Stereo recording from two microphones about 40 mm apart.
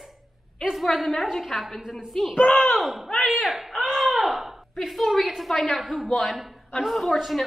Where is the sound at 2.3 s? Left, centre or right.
Left.